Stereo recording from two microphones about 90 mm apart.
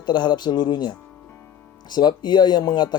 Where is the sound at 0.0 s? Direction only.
55° left (ahead or behind).